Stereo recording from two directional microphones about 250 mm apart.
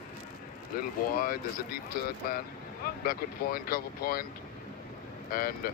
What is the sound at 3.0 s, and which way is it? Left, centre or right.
Speech, left.